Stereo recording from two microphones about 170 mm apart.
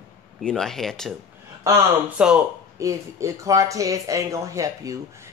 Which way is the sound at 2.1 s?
5° right (ahead or behind).